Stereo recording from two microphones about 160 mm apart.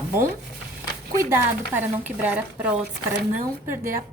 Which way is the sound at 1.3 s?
10° right (ahead or behind).